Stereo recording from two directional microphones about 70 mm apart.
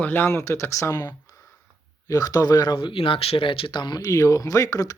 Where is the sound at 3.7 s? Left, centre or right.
Left.